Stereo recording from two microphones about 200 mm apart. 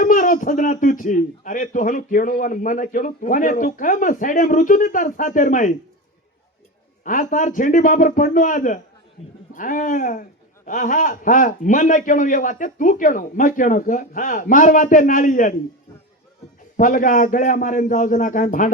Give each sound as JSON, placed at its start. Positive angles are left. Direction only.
{"t": 0.0, "sound": "a man's voice", "side_deg": 40}
{"t": 7.0, "sound": "a man's voice", "side_deg": 40}
{"t": 16.7, "sound": "a man's voice", "side_deg": 40}